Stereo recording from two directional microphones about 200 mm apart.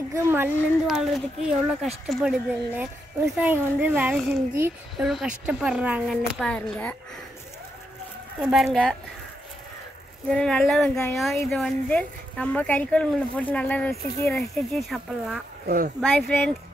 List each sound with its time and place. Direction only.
0.1 s a woman's voice: 10° right (ahead or behind)
4.9 s a woman's voice: centre (ahead or behind)
8.4 s a woman's voice: centre (ahead or behind)
10.3 s a woman's voice: 5° left (ahead or behind)
15.6 s speech: 45° right (ahead or behind)
16.0 s a woman's voice: 5° left (ahead or behind)